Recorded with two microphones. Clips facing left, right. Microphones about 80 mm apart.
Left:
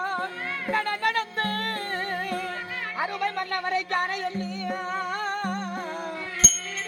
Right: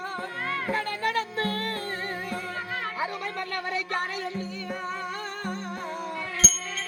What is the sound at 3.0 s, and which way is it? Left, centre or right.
Music, left.